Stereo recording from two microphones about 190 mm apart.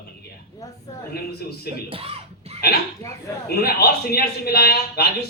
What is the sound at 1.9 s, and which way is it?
Speech, 30° right (ahead or behind).